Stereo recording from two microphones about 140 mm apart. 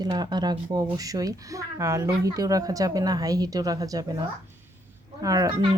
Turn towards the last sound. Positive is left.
turn(degrees=-25)  # may be behind; listen again after turning